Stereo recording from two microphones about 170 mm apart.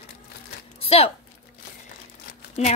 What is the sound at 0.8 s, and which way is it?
Speech, 35° left (ahead or behind).